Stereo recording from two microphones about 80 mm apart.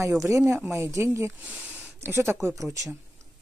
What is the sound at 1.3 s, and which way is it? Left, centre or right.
Speech, centre.